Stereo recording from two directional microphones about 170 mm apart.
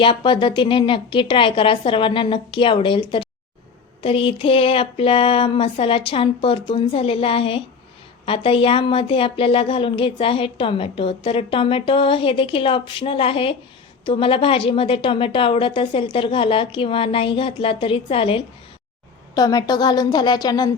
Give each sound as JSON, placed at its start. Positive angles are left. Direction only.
{"t": 0.0, "sound": "a woman's voice", "side_deg": 30}
{"t": 4.0, "sound": "a woman's voice", "side_deg": 30}